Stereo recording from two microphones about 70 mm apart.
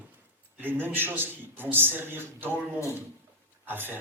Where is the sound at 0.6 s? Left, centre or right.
Right.